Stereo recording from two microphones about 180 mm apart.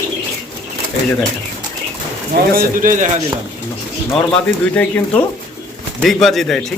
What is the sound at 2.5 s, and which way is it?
Speech, 45° right (ahead or behind).